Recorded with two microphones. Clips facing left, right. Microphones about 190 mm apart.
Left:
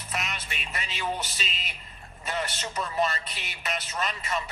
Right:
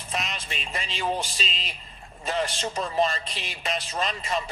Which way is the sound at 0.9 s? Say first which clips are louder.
Right 4 dB; 30° right (ahead or behind).